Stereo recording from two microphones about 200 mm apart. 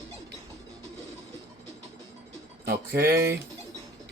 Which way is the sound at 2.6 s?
50° right (ahead or behind).